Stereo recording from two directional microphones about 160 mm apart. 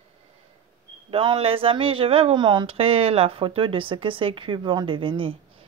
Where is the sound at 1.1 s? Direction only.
35° right (ahead or behind).